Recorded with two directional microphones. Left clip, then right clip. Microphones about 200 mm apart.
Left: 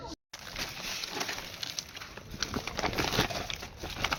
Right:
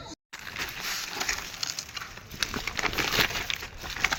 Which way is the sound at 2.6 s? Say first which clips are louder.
Right 3 dB; 40° left (ahead or behind).